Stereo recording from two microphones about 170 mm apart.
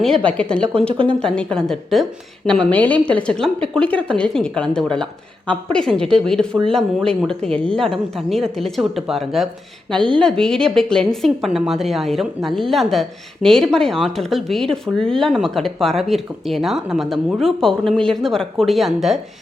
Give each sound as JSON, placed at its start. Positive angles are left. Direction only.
{"t": 0.3, "sound": "a woman's voice", "side_deg": 5}
{"t": 0.8, "sound": "speech", "side_deg": -30}
{"t": 1.2, "sound": "a woman's voice", "side_deg": 5}